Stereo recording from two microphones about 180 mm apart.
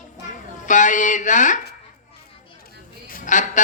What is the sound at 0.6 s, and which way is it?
Speech, 45° left (ahead or behind).